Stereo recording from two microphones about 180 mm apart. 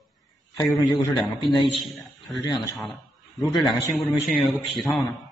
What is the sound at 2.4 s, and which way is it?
Speech, 20° left (ahead or behind).